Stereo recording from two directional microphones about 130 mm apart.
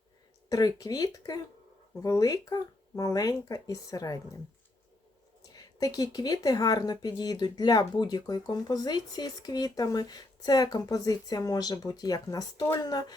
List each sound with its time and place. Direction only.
0.5 s speech: 30° left (ahead or behind)
5.5 s speech: 30° left (ahead or behind)